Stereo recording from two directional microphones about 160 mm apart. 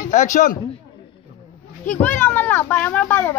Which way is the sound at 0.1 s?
50° left (ahead or behind).